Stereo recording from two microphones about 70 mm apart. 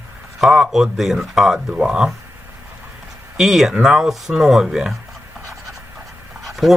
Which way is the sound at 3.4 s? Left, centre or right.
Centre.